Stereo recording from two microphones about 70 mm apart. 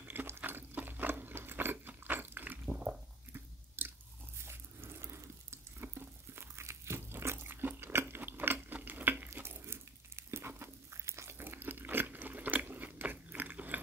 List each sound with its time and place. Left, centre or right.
0.1 s sewing machine: right
3.3 s chewing: right
4.4 s water tap: right